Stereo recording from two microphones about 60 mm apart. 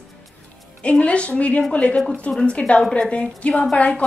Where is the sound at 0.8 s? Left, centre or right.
Left.